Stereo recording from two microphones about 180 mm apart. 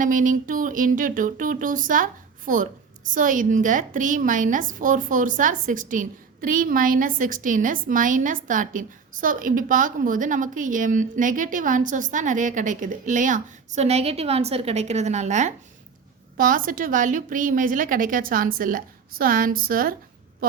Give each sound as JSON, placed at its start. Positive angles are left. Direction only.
{"t": 0.0, "sound": "a woman's voice", "side_deg": -50}